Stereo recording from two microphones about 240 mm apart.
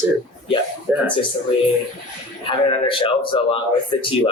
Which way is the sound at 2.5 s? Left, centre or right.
Left.